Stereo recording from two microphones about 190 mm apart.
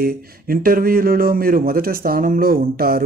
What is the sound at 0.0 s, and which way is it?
Speech, 50° right (ahead or behind).